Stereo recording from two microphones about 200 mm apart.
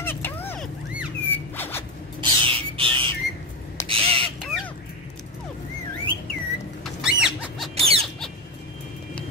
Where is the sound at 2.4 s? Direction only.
25° right (ahead or behind).